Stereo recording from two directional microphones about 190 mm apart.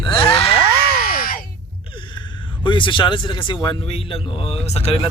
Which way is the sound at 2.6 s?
25° left (ahead or behind).